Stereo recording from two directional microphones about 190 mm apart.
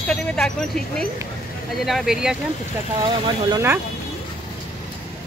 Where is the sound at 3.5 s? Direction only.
15° right (ahead or behind).